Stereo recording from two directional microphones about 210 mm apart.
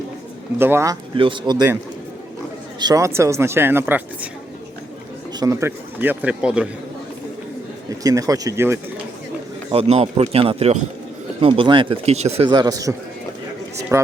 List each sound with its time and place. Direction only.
0.6 s speech: 10° right (ahead or behind)
1.1 s speech: 25° right (ahead or behind)
2.7 s speech: 20° right (ahead or behind)
5.4 s speech: 15° right (ahead or behind)
8.0 s speech: 15° right (ahead or behind)
9.7 s speech: 30° right (ahead or behind)
12.5 s speech: 20° right (ahead or behind)